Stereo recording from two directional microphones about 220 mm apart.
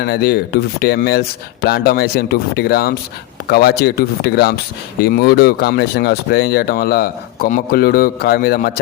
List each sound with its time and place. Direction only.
0.0 s speech: 45° left (ahead or behind)